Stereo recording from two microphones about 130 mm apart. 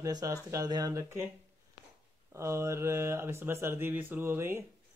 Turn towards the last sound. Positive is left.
turn(degrees=-20)  # may be behind; listen again after turning